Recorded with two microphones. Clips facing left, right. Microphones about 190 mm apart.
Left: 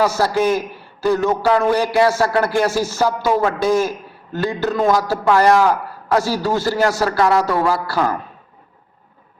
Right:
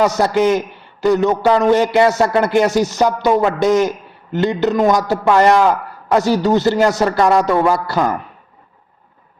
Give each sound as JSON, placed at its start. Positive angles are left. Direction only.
{"t": 0.0, "sound": "a man's voice", "side_deg": -20}